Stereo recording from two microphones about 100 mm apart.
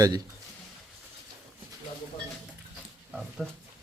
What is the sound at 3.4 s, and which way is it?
Speech, centre (ahead or behind).